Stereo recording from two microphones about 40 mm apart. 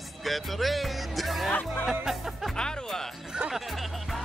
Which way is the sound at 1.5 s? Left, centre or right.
Left.